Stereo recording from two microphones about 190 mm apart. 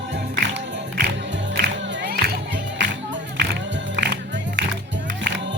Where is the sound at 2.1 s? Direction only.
55° right (ahead or behind).